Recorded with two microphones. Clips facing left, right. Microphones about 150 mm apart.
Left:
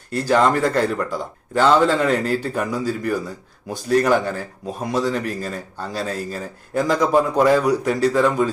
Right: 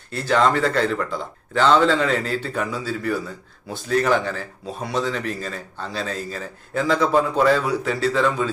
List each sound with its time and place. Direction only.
0.3 s speech: 10° left (ahead or behind)